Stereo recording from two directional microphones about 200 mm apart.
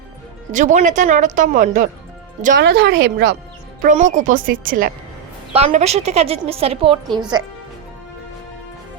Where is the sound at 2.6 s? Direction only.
55° right (ahead or behind).